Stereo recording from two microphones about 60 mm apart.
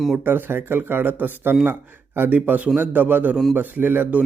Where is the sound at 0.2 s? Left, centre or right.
Right.